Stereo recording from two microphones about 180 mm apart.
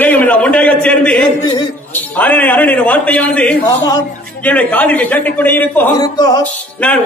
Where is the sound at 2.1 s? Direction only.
10° left (ahead or behind).